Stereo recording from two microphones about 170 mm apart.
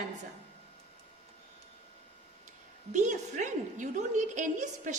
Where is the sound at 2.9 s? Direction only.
45° right (ahead or behind).